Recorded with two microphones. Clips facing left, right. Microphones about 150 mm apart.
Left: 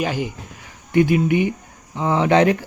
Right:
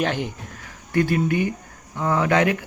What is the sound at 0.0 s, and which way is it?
Speech, 5° left (ahead or behind).